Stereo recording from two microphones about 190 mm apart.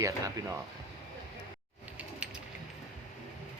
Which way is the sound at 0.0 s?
15° right (ahead or behind).